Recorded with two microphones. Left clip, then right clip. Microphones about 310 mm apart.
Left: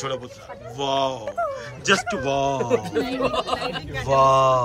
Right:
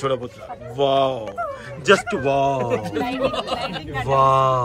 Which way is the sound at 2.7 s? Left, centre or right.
Left.